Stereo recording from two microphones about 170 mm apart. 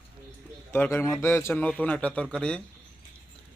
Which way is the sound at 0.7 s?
15° left (ahead or behind).